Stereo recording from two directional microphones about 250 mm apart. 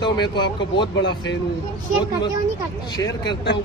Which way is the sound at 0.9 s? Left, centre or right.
Left.